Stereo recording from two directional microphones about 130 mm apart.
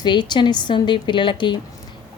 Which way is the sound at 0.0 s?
35° left (ahead or behind).